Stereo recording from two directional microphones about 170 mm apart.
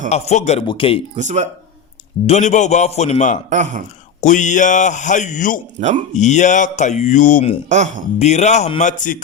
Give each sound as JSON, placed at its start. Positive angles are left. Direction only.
{"t": 0.1, "sound": "a man's voice", "side_deg": 40}
{"t": 1.1, "sound": "speech", "side_deg": -45}
{"t": 2.2, "sound": "speech", "side_deg": 40}
{"t": 3.5, "sound": "speech", "side_deg": -45}
{"t": 4.2, "sound": "speech", "side_deg": 45}
{"t": 7.7, "sound": "speech", "side_deg": -45}
{"t": 8.2, "sound": "speech", "side_deg": 40}